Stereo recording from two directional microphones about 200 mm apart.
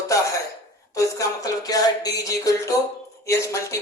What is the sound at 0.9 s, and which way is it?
Speech, 15° left (ahead or behind).